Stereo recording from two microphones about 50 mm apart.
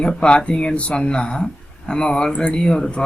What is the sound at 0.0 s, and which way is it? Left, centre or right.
Speech, centre.